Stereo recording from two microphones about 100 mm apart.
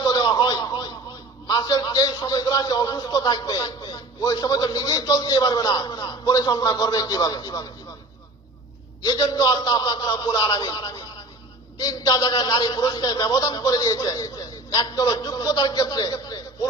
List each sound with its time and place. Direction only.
0.0 s a sound: 40° left (ahead or behind)
1.5 s a man's voice: 40° left (ahead or behind)
9.0 s a man's voice: 40° left (ahead or behind)